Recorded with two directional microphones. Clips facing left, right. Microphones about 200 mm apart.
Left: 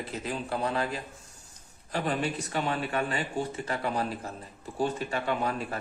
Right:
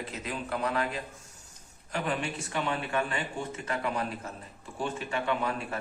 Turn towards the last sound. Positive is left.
turn(degrees=40)  # may be behind; listen again after turning